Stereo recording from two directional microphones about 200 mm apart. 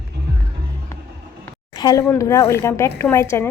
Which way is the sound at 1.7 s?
20° left (ahead or behind).